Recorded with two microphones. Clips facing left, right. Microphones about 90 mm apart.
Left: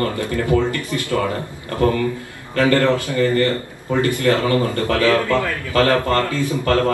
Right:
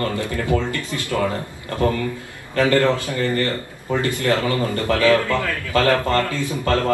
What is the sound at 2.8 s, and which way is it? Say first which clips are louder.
Speech: left 2 dB; 20° right (ahead or behind).